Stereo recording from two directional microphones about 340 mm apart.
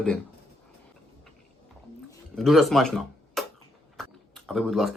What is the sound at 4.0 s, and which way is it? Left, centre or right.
Typing, centre.